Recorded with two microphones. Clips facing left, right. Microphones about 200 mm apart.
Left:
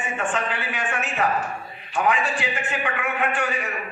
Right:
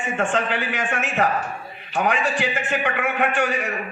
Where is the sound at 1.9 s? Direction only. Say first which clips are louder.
Right 1 dB; 70° right (ahead or behind).